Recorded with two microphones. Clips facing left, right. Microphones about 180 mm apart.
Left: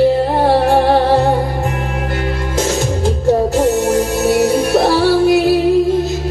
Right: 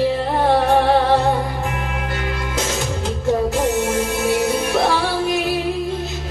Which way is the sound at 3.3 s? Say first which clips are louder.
Left 5 dB; 40° left (ahead or behind).